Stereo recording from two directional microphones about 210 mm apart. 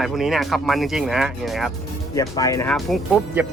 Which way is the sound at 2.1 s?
15° left (ahead or behind).